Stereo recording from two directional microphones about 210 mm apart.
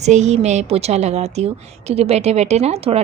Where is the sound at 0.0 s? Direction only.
35° right (ahead or behind).